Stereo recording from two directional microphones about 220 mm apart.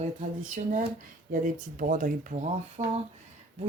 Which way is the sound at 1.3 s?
40° right (ahead or behind).